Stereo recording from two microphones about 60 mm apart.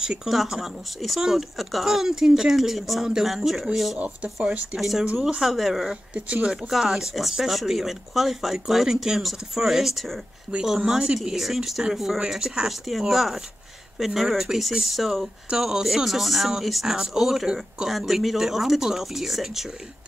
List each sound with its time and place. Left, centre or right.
0.0 s speech: centre
4.0 s speech: centre
4.7 s speech: centre
6.1 s speech: right
6.5 s speech: centre